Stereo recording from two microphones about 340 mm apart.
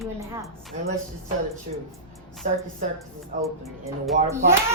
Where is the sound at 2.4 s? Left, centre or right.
Right.